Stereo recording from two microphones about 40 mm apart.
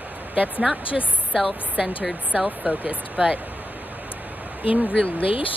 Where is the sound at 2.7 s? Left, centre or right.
Right.